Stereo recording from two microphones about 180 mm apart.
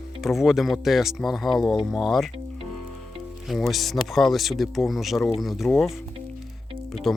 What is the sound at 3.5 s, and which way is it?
Speech, centre (ahead or behind).